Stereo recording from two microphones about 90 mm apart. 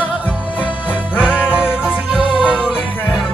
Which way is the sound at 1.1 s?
15° right (ahead or behind).